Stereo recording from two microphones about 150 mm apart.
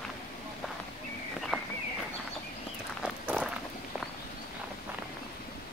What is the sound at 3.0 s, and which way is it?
Walk, 5° right (ahead or behind).